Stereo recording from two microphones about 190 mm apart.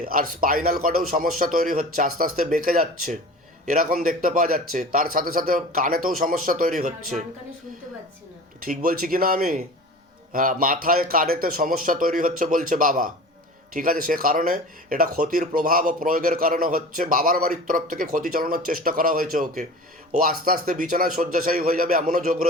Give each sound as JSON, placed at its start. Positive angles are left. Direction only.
{"t": 0.0, "sound": "speech", "side_deg": -50}
{"t": 8.6, "sound": "speech", "side_deg": -50}